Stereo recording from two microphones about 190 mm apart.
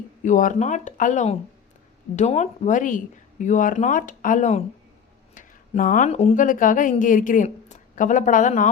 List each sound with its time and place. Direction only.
0.2 s a woman's voice: 45° left (ahead or behind)